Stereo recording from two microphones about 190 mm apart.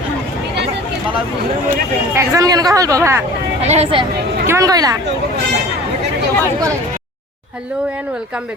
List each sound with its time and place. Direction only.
2.1 s speech: 15° right (ahead or behind)
3.6 s speech: 35° right (ahead or behind)
4.4 s speech: 15° right (ahead or behind)